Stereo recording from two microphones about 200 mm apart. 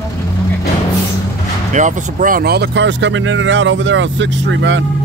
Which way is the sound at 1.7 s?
40° right (ahead or behind).